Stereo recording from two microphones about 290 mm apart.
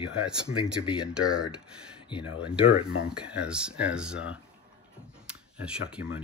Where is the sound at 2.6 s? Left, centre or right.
Centre.